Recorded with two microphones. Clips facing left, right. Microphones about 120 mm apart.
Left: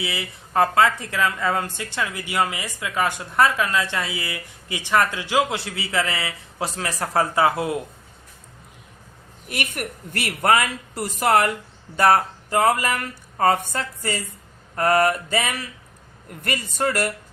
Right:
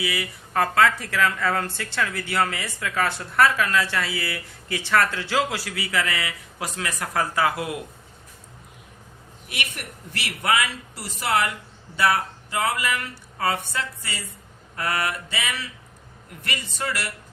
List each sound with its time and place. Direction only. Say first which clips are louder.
0.0 s a woman's voice: right 1 dB; 25° left (ahead or behind)
9.5 s speech: left 5 dB; 45° left (ahead or behind)